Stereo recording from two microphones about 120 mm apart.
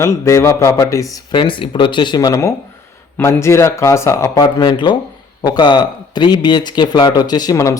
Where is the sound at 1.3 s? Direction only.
45° left (ahead or behind).